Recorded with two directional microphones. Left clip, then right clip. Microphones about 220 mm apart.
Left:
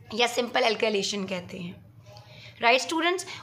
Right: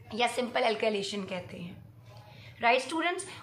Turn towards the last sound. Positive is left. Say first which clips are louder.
# left 5 dB
turn(degrees=50)  # may be behind; listen again after turning